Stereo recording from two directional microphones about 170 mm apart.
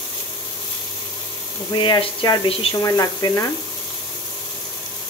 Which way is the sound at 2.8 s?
20° left (ahead or behind).